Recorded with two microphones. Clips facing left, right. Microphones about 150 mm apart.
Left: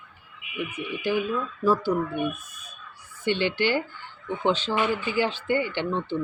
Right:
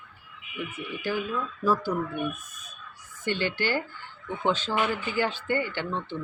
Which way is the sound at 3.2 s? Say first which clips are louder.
Left 4 dB; 45° right (ahead or behind).